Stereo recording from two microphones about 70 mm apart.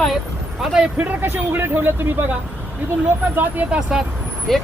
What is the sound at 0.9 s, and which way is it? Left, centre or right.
Speech, right.